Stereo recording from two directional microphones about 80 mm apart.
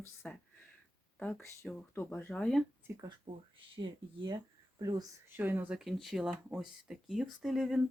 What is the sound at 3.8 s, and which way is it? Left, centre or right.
Speech, right.